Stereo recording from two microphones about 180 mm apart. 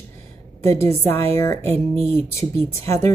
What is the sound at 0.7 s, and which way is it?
Speech, 15° left (ahead or behind).